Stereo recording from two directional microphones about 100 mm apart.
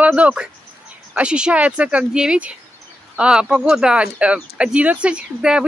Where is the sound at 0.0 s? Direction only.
15° right (ahead or behind).